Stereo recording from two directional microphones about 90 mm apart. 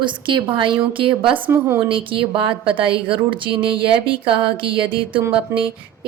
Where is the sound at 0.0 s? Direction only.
65° right (ahead or behind).